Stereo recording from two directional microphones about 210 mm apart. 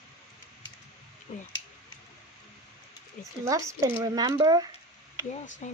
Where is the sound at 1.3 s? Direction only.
35° left (ahead or behind).